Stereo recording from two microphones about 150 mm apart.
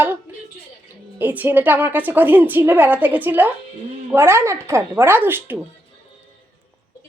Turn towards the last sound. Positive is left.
turn(degrees=-15)  # may be behind; listen again after turning